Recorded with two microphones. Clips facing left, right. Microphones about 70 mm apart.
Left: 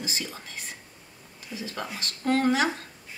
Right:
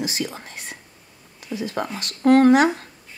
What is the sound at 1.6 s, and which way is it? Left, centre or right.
Speech, right.